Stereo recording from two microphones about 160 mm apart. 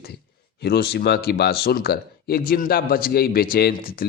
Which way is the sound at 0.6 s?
90° left.